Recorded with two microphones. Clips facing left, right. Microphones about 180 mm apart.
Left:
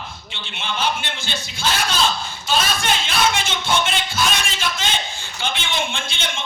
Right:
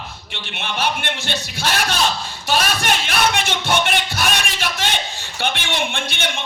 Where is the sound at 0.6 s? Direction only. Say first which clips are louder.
Right 1 dB; 60° right (ahead or behind).